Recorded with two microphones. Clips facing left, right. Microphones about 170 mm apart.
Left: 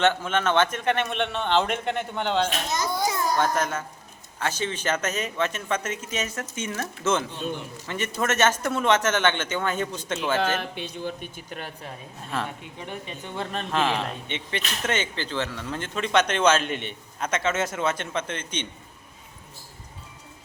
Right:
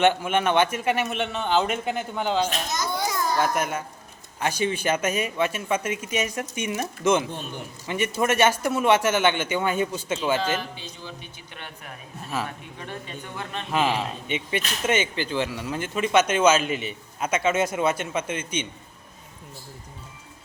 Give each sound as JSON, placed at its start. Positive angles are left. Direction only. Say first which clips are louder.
{"t": 0.0, "sound": "a man's voice", "louder": "right 2 dB", "side_deg": -10}
{"t": 2.7, "sound": "children playing", "louder": "left 2 dB", "side_deg": 30}
{"t": 3.3, "sound": "speech", "louder": "even", "side_deg": -10}
{"t": 10.3, "sound": "a man's voice", "louder": "left 1 dB", "side_deg": 60}
{"t": 12.5, "sound": "a woman's voice", "louder": "left 1 dB", "side_deg": 20}
{"t": 13.3, "sound": "speech", "louder": "left 4 dB", "side_deg": 30}
{"t": 13.7, "sound": "speech", "louder": "right 2 dB", "side_deg": -10}